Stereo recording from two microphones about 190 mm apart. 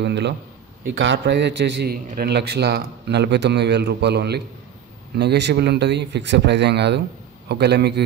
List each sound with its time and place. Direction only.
0.0 s a man's voice: 65° right (ahead or behind)